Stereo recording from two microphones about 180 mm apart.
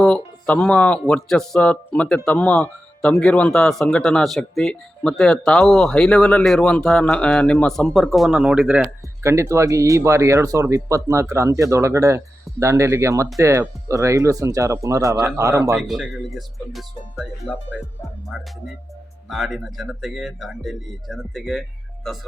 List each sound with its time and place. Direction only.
0.0 s speech: 5° left (ahead or behind)
9.3 s speech: 15° right (ahead or behind)
15.7 s speech: centre (ahead or behind)
19.3 s speech: centre (ahead or behind)